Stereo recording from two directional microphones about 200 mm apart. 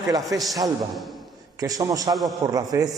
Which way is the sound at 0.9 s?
Centre (ahead or behind).